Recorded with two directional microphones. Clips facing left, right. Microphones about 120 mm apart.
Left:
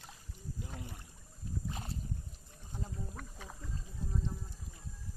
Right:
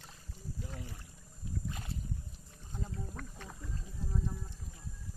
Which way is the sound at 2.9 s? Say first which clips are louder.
Right 1 dB; 10° left (ahead or behind).